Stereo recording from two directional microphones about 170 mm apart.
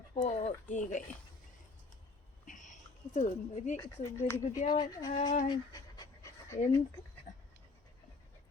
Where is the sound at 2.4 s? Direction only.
50° left (ahead or behind).